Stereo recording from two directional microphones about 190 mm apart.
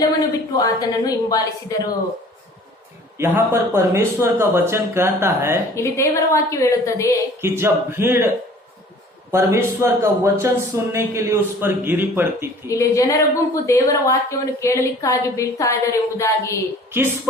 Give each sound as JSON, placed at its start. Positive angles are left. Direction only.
{"t": 0.5, "sound": "a woman's voice", "side_deg": 20}
{"t": 3.2, "sound": "speech", "side_deg": -15}
{"t": 5.7, "sound": "a woman's voice", "side_deg": 15}
{"t": 7.4, "sound": "speech", "side_deg": -15}
{"t": 9.3, "sound": "speech", "side_deg": -15}
{"t": 12.6, "sound": "a woman's voice", "side_deg": 15}